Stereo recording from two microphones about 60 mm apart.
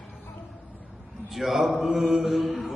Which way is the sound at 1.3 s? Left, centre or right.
Centre.